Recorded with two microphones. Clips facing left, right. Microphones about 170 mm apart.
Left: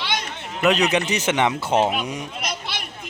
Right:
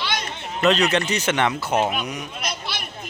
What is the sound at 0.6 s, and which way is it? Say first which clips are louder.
Speech: even; 15° left (ahead or behind).